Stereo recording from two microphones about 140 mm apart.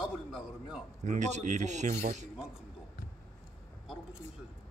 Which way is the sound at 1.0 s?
60° right (ahead or behind).